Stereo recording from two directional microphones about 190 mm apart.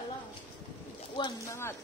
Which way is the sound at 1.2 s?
15° left (ahead or behind).